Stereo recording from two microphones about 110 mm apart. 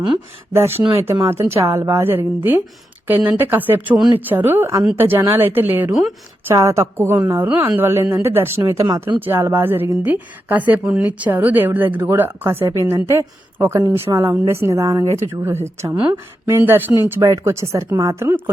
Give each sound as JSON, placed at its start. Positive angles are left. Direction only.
{"t": 0.9, "sound": "a woman's voice", "side_deg": -25}
{"t": 5.9, "sound": "speech", "side_deg": -5}
{"t": 6.5, "sound": "a woman's voice", "side_deg": -25}
{"t": 16.9, "sound": "speech", "side_deg": -30}